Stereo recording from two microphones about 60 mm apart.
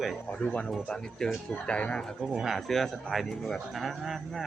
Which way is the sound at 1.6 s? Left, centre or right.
Centre.